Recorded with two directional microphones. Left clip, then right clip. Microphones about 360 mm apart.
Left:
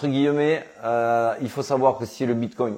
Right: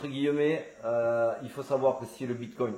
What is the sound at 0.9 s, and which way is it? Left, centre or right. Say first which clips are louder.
Speech: left 6 dB; left.